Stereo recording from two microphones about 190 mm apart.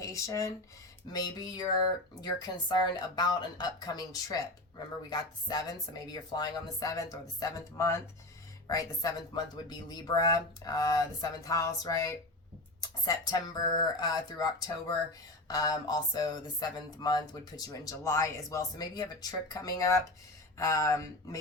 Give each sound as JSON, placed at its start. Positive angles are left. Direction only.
{"t": 0.0, "sound": "speech", "side_deg": 15}